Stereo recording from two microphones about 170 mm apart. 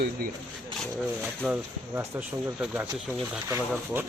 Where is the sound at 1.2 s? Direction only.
10° right (ahead or behind).